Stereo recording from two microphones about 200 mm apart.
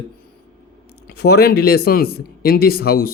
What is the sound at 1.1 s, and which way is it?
Speech, 55° left (ahead or behind).